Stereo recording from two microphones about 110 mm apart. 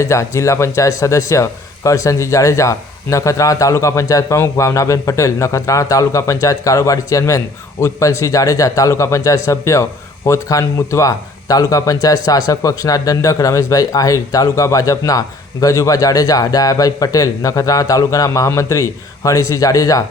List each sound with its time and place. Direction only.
0.0 s a man's voice: 25° left (ahead or behind)